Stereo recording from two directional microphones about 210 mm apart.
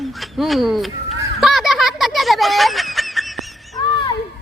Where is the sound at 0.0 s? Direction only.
Centre (ahead or behind).